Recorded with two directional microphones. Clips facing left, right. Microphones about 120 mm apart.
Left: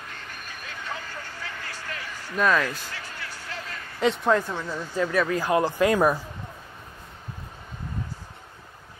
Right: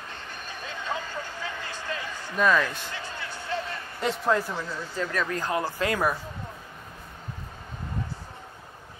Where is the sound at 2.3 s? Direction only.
Centre (ahead or behind).